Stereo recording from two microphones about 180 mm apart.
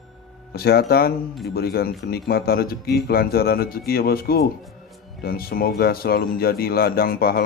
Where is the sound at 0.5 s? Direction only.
60° left (ahead or behind).